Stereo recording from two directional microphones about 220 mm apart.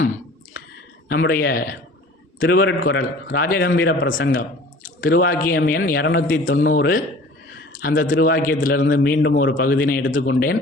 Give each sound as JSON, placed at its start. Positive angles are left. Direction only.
{"t": 1.0, "sound": "a man's voice", "side_deg": 45}
{"t": 4.3, "sound": "speech", "side_deg": 40}
{"t": 6.4, "sound": "a man's voice", "side_deg": 60}
{"t": 6.7, "sound": "a man's voice", "side_deg": 40}